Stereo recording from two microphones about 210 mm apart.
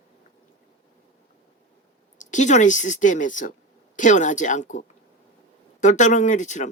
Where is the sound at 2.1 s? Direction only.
35° left (ahead or behind).